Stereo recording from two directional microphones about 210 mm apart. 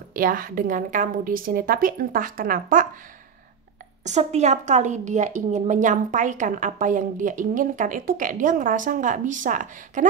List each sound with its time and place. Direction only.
0.1 s a woman's voice: 40° right (ahead or behind)
4.0 s a woman's voice: 35° right (ahead or behind)